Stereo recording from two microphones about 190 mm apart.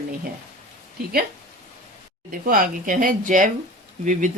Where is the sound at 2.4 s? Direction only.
45° right (ahead or behind).